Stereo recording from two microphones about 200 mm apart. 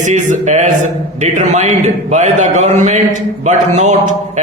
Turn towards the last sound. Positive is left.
turn(degrees=-35)  # may be behind; listen again after turning